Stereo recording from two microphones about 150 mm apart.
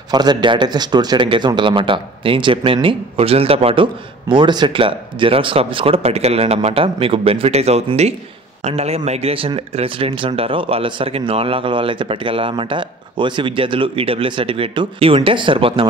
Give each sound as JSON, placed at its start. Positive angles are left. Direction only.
{"t": 0.1, "sound": "a man's voice", "side_deg": -30}